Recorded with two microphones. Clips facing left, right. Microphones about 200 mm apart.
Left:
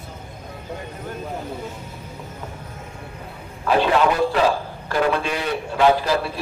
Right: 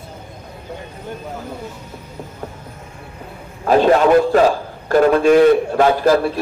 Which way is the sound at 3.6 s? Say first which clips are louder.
Right 6 dB; 45° right (ahead or behind).